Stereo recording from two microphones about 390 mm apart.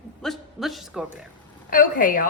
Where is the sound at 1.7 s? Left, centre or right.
Left.